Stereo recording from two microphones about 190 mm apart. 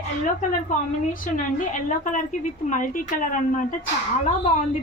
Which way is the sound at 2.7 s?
45° left (ahead or behind).